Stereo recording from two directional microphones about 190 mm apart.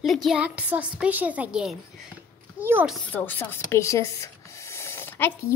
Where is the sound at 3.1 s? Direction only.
10° left (ahead or behind).